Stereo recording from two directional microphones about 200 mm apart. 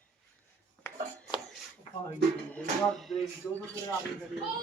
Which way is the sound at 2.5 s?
Centre (ahead or behind).